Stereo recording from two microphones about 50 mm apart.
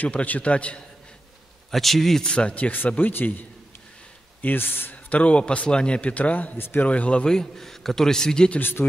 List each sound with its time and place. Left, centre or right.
0.0 s a man's voice: left
1.7 s a man's voice: centre
2.2 s a man's voice: centre
2.5 s a man's voice: left
4.9 s a man's voice: left; by 8.5 s centre
8.5 s a man's voice: left